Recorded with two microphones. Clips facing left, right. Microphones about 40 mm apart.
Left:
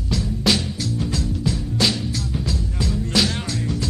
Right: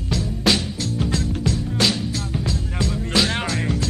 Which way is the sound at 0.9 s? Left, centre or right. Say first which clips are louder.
Right 3 dB; right.